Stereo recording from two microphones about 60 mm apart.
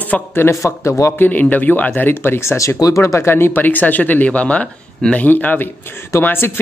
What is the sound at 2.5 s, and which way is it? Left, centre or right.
Speech, left.